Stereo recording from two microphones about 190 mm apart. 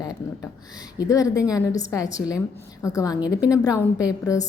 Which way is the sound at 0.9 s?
20° left (ahead or behind).